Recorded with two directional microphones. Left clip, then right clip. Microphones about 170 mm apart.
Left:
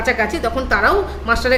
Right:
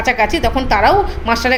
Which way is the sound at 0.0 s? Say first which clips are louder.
Right 3 dB; 25° right (ahead or behind).